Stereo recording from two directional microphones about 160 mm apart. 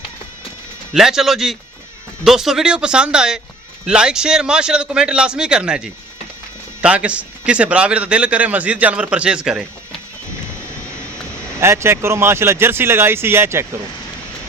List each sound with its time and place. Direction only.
0.9 s a man's voice: centre (ahead or behind)
11.6 s speech: 15° right (ahead or behind)